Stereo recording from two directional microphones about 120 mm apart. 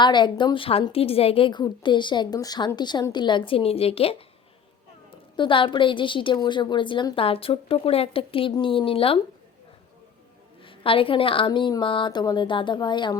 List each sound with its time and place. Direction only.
0.0 s a woman's voice: 40° left (ahead or behind)
10.6 s a woman's voice: 50° left (ahead or behind)